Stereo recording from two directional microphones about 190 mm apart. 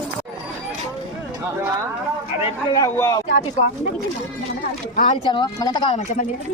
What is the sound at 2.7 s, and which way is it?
Speech, 15° left (ahead or behind).